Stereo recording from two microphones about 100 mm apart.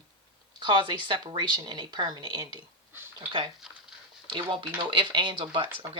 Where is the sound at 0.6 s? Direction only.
50° right (ahead or behind).